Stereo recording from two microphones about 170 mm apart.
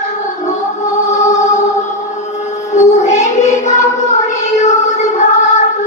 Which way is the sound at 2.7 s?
45° left (ahead or behind).